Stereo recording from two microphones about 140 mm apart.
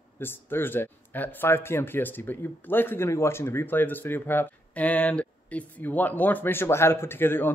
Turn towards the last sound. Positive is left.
turn(degrees=15)  # may be behind; listen again after turning